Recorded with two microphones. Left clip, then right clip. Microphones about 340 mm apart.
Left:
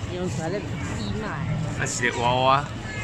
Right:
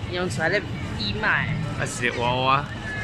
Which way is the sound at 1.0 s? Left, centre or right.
Right.